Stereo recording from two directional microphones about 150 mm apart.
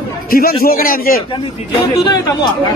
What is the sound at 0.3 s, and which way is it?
Speech, 80° left.